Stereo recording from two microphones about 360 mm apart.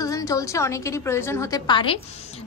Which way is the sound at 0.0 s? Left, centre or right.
Centre.